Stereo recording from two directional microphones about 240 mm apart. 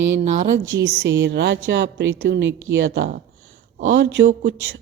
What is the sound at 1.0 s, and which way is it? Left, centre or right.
A woman's voice, right.